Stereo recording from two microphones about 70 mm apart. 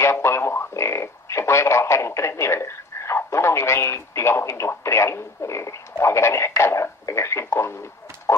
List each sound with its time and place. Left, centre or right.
0.0 s speech: left